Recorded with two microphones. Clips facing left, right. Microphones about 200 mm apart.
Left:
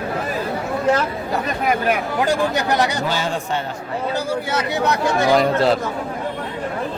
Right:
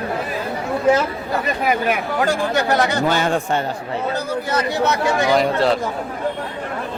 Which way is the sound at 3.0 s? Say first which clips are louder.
Right 4 dB; 55° right (ahead or behind).